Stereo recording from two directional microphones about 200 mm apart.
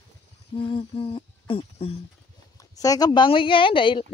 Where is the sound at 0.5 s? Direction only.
25° left (ahead or behind).